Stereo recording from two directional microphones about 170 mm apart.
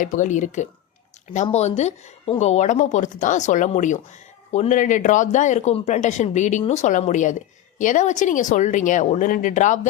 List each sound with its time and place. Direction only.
0.0 s speech: 50° left (ahead or behind)